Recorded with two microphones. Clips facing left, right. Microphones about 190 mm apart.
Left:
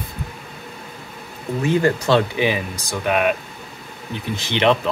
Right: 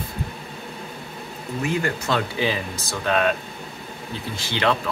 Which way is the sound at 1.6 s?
30° left (ahead or behind).